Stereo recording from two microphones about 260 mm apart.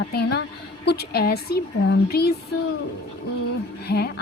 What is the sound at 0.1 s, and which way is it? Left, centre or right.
A woman's voice, left.